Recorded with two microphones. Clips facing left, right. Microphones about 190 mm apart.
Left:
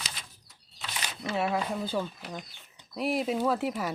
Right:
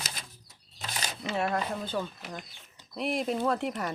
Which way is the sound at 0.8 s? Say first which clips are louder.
Right 1 dB; 40° right (ahead or behind).